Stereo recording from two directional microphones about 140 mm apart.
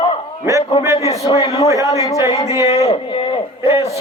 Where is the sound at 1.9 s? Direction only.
25° left (ahead or behind).